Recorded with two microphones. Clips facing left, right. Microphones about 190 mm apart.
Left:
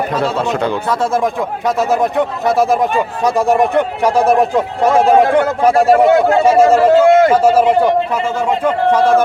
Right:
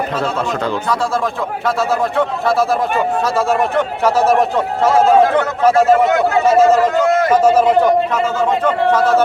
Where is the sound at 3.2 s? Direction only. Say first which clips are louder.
Left 3 dB; 15° left (ahead or behind).